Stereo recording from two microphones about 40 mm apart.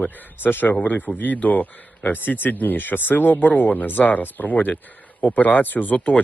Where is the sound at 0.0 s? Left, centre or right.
Left.